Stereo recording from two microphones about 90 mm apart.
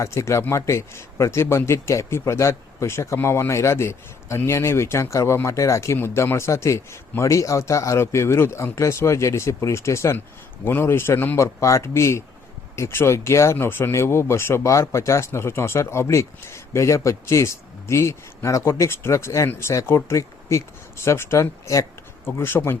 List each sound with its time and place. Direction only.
0.0 s a man's voice: 35° left (ahead or behind)
22.3 s speech: 25° left (ahead or behind)